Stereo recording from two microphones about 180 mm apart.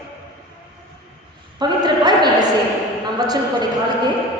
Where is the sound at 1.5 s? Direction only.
25° right (ahead or behind).